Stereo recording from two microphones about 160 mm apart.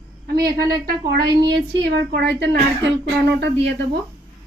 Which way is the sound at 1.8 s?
90° right.